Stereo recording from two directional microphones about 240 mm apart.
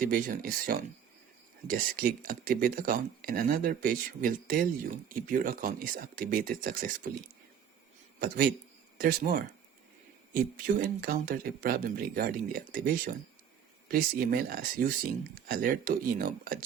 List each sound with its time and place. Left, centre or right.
0.0 s speech: right
9.0 s speech: right